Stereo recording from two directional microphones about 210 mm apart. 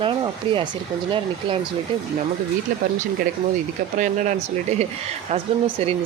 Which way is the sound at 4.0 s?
35° right (ahead or behind).